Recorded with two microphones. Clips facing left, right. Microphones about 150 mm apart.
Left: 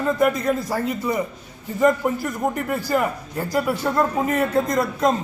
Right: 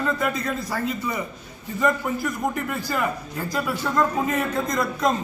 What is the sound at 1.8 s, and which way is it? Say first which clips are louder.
A man's voice: left 4 dB; 30° left (ahead or behind).